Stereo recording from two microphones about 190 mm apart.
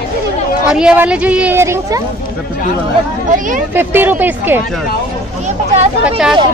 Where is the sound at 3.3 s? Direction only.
45° right (ahead or behind).